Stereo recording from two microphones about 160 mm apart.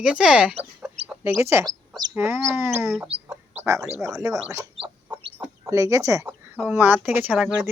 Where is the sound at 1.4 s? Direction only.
15° right (ahead or behind).